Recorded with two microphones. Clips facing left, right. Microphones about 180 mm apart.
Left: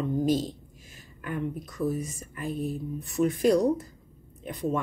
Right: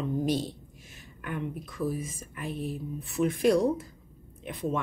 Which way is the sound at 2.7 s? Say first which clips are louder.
Left 2 dB; centre (ahead or behind).